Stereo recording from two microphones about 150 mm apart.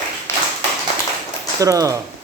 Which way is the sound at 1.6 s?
25° right (ahead or behind).